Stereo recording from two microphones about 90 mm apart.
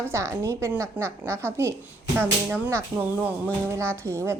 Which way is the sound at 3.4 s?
30° right (ahead or behind).